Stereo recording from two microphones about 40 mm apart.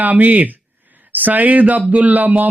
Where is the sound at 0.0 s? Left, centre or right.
Right.